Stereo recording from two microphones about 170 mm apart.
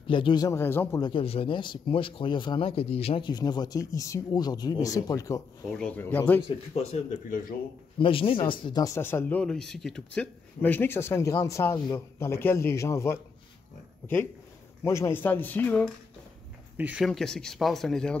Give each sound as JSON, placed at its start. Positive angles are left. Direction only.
{"t": 0.0, "sound": "speech", "side_deg": 30}
{"t": 1.0, "sound": "speech", "side_deg": 30}
{"t": 5.7, "sound": "speech", "side_deg": 5}
{"t": 6.7, "sound": "speech", "side_deg": 40}
{"t": 8.0, "sound": "speech", "side_deg": 30}
{"t": 14.8, "sound": "speech", "side_deg": 15}
{"t": 16.7, "sound": "speech", "side_deg": -5}